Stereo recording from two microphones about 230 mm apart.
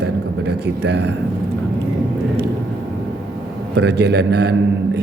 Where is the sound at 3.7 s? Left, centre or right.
Right.